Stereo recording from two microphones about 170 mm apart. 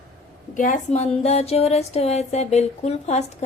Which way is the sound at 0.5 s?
50° left (ahead or behind).